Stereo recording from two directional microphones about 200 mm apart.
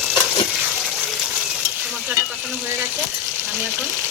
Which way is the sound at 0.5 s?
5° right (ahead or behind).